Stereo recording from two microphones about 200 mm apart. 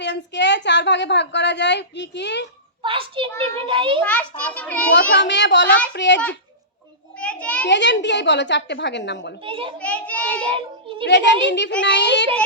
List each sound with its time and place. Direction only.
0.0 s a woman's voice: 60° left (ahead or behind)
2.8 s a child's voice: 25° right (ahead or behind)
4.0 s a child's voice: 5° left (ahead or behind)
5.2 s a woman's voice: 60° left (ahead or behind)
7.2 s a sound: 5° left (ahead or behind)
7.7 s a woman's voice: 60° left (ahead or behind)
9.4 s a child's voice: 25° right (ahead or behind)
9.7 s a child's voice: 5° left (ahead or behind)
10.5 s a child's voice: 25° right (ahead or behind)
11.0 s a woman's voice: 60° left (ahead or behind)